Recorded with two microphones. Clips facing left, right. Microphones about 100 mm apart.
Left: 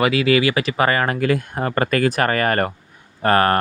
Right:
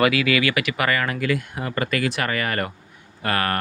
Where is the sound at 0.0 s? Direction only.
25° left (ahead or behind).